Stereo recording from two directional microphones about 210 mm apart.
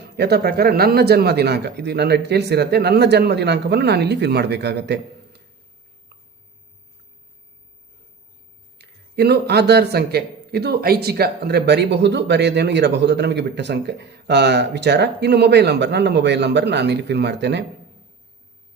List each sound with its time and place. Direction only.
0.0 s a man's voice: 50° right (ahead or behind)
8.8 s a man's voice: 50° right (ahead or behind)